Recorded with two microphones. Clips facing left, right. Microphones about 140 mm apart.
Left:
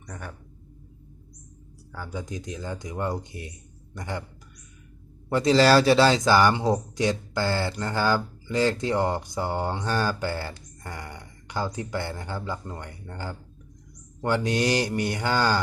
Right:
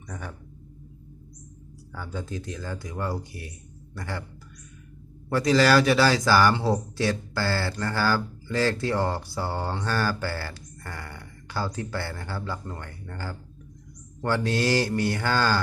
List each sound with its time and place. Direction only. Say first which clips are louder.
1.9 s a man's voice: even; 15° left (ahead or behind)
5.3 s a man's voice: left 2 dB; 25° left (ahead or behind)